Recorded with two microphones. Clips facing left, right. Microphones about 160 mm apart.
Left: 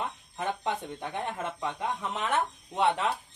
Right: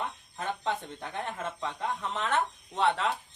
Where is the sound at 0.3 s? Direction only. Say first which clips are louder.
Left 1 dB; 15° left (ahead or behind).